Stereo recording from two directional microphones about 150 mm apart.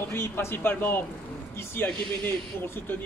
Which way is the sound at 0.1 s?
15° left (ahead or behind).